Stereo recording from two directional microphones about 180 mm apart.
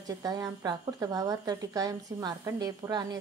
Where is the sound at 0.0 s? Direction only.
20° right (ahead or behind).